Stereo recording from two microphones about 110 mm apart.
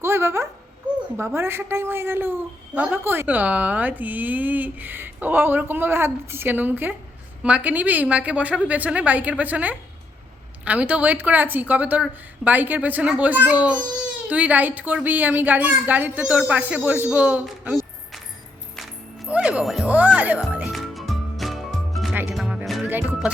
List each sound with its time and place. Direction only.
0.0 s a sound: 25° right (ahead or behind)
1.1 s a woman's voice: 20° right (ahead or behind)
17.6 s a sound: 15° right (ahead or behind)
19.3 s music: 10° right (ahead or behind)
20.7 s music: centre (ahead or behind)
22.1 s music: 20° right (ahead or behind)
22.4 s music: 5° right (ahead or behind)
22.9 s speech: 15° right (ahead or behind)